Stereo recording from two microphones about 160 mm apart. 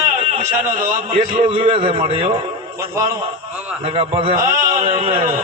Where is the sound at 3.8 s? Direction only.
35° right (ahead or behind).